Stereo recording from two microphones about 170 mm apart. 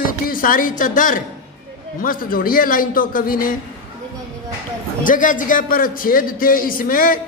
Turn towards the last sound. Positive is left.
turn(degrees=55)  # may be behind; listen again after turning